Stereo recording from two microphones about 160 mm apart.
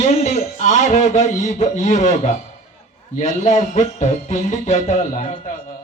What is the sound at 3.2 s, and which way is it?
Speech, 50° left (ahead or behind).